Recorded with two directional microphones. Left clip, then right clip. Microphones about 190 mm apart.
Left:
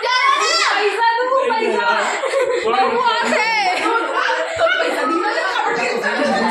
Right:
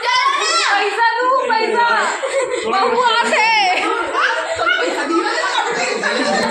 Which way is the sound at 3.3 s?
Centre (ahead or behind).